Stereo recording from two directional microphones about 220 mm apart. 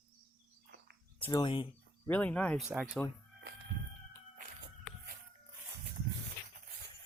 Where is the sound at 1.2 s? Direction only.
15° left (ahead or behind).